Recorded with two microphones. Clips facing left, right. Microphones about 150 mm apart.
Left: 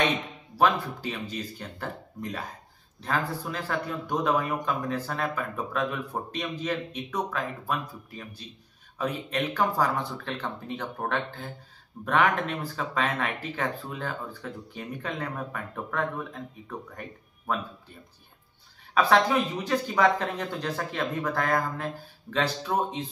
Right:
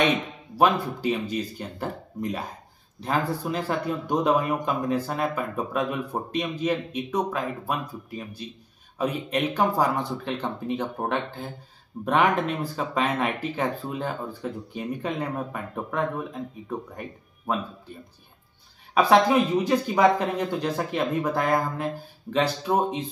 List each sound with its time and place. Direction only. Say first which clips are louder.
0.6 s speech: right 3 dB; 15° right (ahead or behind)
18.9 s speech: right 4 dB; 15° right (ahead or behind)